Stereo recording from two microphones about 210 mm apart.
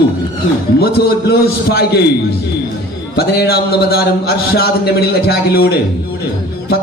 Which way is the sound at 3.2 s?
50° left (ahead or behind).